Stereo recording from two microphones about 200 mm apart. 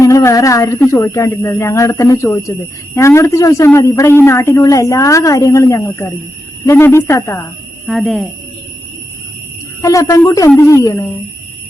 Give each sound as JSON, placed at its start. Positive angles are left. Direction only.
{"t": 0.0, "sound": "speech", "side_deg": 15}
{"t": 7.9, "sound": "speech", "side_deg": 0}
{"t": 9.8, "sound": "speech", "side_deg": 15}